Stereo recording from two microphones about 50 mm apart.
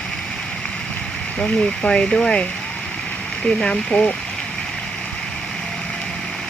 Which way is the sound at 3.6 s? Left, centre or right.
Centre.